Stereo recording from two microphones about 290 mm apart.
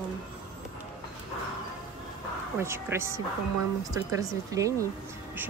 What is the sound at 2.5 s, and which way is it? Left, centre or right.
Speech, centre.